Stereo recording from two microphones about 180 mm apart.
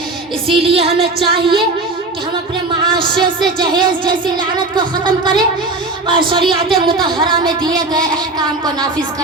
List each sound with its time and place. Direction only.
0.6 s a woman's voice: 30° right (ahead or behind)
2.9 s speech: 25° right (ahead or behind)